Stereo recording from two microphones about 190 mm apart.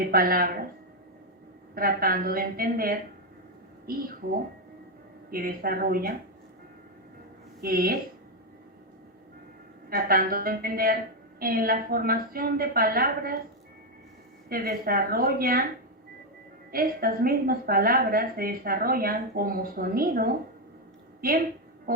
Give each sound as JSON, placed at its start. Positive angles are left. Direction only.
{"t": 0.0, "sound": "speech", "side_deg": -50}
{"t": 1.7, "sound": "a woman's voice", "side_deg": -50}
{"t": 5.3, "sound": "a woman's voice", "side_deg": -50}
{"t": 7.6, "sound": "speech", "side_deg": -55}
{"t": 9.9, "sound": "a woman's voice", "side_deg": -50}
{"t": 14.5, "sound": "a woman's voice", "side_deg": -50}
{"t": 16.7, "sound": "a woman's voice", "side_deg": -50}
{"t": 21.9, "sound": "music", "side_deg": -50}